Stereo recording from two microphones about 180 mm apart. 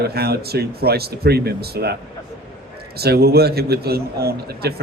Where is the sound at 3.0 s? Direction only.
60° right (ahead or behind).